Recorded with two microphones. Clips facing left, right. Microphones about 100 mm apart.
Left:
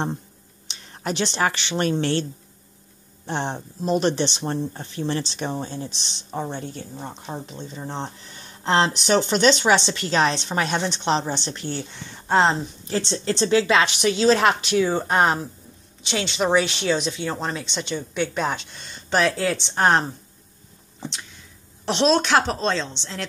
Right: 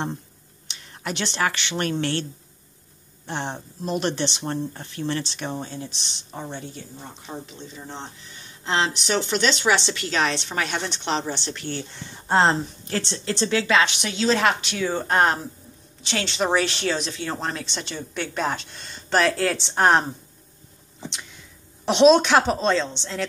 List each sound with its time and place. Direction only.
0.7 s speech: 30° left (ahead or behind)
3.3 s speech: 30° left (ahead or behind)
12.3 s a woman's voice: centre (ahead or behind)
12.9 s a woman's voice: 25° left (ahead or behind); by 20.1 s centre (ahead or behind)
21.8 s a woman's voice: 5° right (ahead or behind)